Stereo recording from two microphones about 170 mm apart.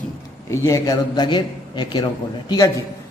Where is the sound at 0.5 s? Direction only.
20° left (ahead or behind).